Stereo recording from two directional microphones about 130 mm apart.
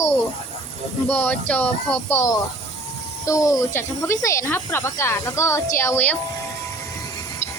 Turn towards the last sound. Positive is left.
turn(degrees=15)  # may be behind; listen again after turning